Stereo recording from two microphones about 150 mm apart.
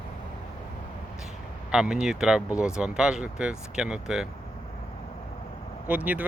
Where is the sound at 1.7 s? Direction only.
5° right (ahead or behind).